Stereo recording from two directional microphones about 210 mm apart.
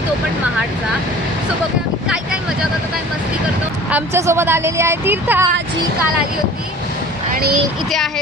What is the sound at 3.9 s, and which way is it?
Speech, 10° right (ahead or behind).